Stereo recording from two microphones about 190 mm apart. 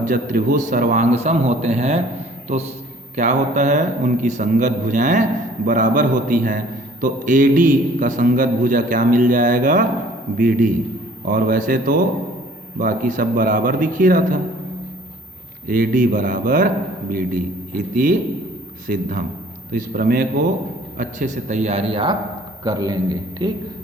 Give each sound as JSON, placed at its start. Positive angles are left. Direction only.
{"t": 0.0, "sound": "a man's voice", "side_deg": -45}
{"t": 15.6, "sound": "a man's voice", "side_deg": -50}